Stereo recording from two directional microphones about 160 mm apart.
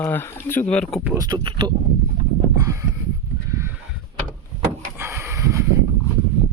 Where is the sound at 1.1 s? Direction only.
25° right (ahead or behind).